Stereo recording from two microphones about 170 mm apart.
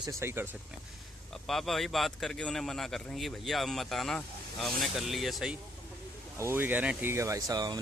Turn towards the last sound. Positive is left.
turn(degrees=-20)  # may be behind; listen again after turning